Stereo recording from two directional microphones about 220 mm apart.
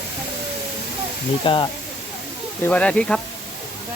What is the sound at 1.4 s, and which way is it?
Speech, 20° left (ahead or behind).